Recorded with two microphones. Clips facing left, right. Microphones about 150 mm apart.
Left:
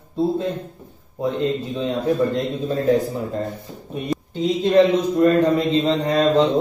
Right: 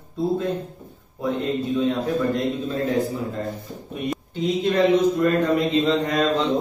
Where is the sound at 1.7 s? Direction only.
25° left (ahead or behind).